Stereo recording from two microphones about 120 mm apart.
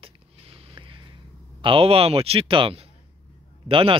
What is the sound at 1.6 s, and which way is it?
Speech, 50° right (ahead or behind).